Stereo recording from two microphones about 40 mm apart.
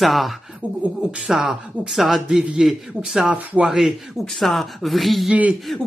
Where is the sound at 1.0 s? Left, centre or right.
Right.